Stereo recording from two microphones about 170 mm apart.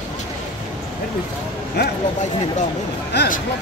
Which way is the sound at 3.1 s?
55° left (ahead or behind).